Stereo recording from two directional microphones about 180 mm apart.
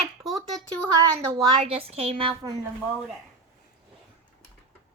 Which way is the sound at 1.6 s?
30° right (ahead or behind).